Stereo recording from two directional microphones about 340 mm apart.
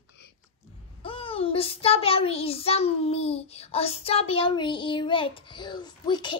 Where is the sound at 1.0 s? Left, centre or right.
Centre.